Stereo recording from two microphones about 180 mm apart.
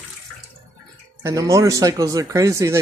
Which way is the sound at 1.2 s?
20° right (ahead or behind).